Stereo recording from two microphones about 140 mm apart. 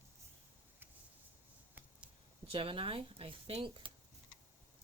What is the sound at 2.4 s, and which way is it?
A woman's voice, 40° right (ahead or behind).